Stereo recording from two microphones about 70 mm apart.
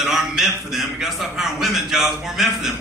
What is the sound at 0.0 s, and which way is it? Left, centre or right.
A man's voice, centre.